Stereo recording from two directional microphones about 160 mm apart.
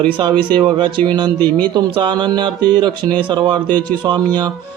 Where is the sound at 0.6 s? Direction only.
30° right (ahead or behind).